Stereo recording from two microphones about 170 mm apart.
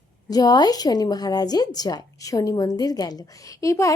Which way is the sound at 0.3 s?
25° left (ahead or behind).